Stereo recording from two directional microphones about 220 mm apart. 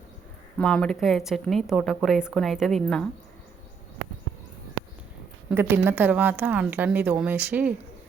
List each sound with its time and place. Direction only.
0.6 s a woman's voice: 5° left (ahead or behind)
5.5 s a woman's voice: 10° right (ahead or behind)